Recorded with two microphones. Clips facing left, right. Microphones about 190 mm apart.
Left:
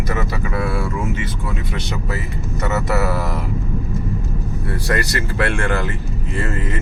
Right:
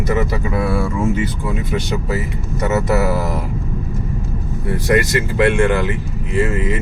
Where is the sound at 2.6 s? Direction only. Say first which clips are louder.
Right 4 dB; 20° right (ahead or behind).